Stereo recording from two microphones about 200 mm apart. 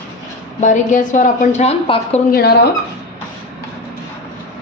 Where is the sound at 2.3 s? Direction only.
50° left (ahead or behind).